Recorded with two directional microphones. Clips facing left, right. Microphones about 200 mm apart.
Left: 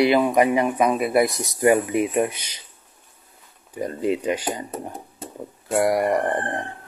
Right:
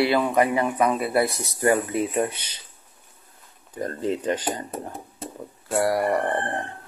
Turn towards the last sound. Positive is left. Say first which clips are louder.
# left 2 dB
turn(degrees=15)  # may be behind; listen again after turning